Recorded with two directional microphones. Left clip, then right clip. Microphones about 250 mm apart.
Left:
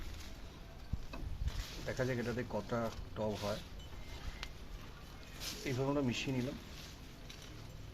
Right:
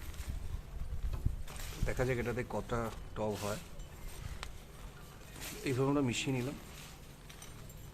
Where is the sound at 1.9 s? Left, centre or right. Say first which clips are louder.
Right 3 dB; centre.